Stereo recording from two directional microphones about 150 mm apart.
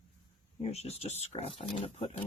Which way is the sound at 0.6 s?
45° left (ahead or behind).